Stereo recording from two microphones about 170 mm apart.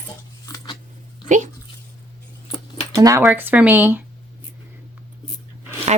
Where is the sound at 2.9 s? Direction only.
20° right (ahead or behind).